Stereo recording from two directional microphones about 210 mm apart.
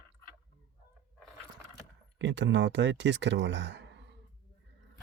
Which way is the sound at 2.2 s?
60° right (ahead or behind).